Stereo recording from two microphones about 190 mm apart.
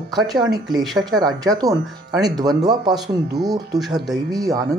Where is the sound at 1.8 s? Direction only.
Centre (ahead or behind).